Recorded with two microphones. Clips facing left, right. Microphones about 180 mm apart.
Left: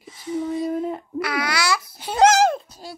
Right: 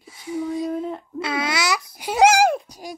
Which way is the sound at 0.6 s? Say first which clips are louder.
Left 1 dB; 5° left (ahead or behind).